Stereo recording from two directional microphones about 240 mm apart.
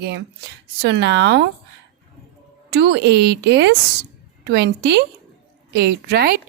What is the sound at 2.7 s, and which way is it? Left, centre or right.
A woman's voice, right.